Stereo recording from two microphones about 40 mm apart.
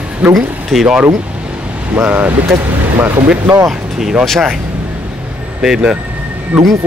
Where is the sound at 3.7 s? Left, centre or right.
Centre.